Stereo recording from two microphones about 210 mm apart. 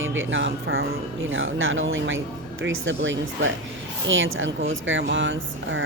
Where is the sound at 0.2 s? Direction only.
65° right (ahead or behind).